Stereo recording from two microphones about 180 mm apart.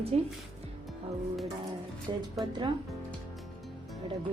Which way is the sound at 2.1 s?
25° right (ahead or behind).